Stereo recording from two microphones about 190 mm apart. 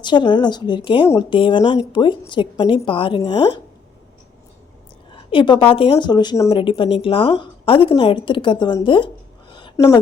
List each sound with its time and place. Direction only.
0.0 s a woman's voice: 25° left (ahead or behind)
5.3 s a woman's voice: 25° left (ahead or behind)
9.6 s a sound: 25° left (ahead or behind)